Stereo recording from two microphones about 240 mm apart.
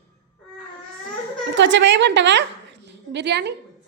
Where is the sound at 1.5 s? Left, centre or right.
Right.